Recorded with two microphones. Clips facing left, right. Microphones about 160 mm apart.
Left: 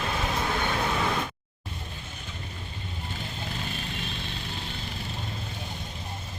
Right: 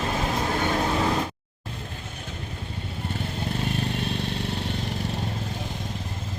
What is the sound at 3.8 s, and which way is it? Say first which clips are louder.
Vehicle: right 8 dB; 65° right (ahead or behind).